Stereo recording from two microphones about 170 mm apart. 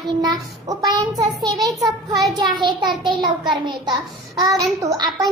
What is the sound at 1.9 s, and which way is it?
Child singing, centre (ahead or behind).